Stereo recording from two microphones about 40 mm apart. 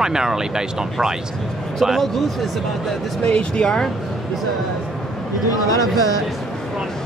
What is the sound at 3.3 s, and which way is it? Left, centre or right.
Speech, left.